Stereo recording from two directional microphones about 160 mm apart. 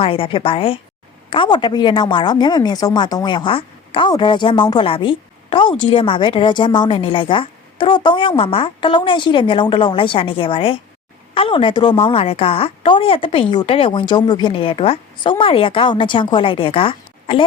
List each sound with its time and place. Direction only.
0.0 s a woman's voice: 35° left (ahead or behind)